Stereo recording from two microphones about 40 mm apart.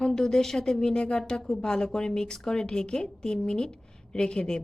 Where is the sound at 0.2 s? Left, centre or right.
Centre.